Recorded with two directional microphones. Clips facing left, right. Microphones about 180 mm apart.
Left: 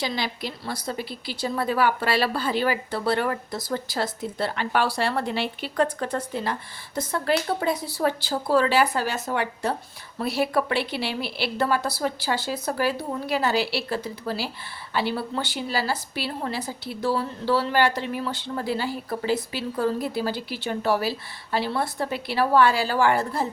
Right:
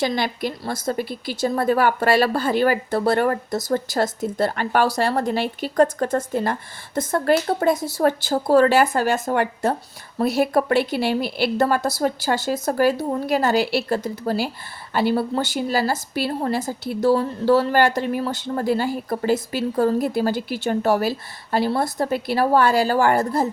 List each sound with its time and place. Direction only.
0.0 s a woman's voice: 50° right (ahead or behind)